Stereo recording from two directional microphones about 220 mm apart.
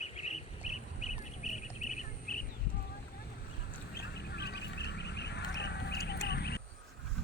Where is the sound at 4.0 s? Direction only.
50° left (ahead or behind).